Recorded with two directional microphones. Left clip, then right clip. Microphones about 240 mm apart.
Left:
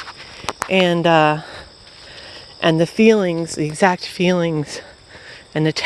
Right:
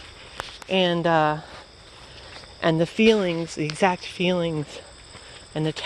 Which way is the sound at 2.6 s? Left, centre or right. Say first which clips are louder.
Left 5 dB; left.